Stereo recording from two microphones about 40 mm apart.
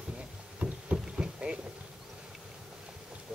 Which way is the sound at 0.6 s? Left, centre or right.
Right.